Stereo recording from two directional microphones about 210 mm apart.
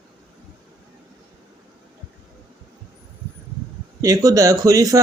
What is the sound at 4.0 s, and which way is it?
Speech, 15° right (ahead or behind).